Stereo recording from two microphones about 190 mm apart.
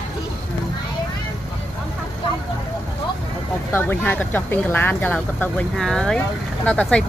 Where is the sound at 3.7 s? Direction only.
10° left (ahead or behind).